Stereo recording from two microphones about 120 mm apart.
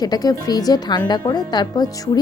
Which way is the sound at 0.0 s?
30° left (ahead or behind).